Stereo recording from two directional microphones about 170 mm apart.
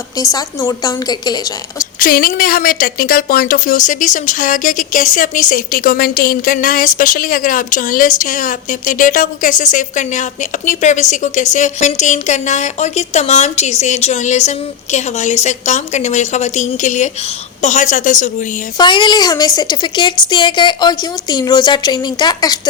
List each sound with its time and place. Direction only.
0.2 s a woman's voice: 20° left (ahead or behind)
2.0 s speech: 55° left (ahead or behind)
18.8 s a woman's voice: 25° left (ahead or behind)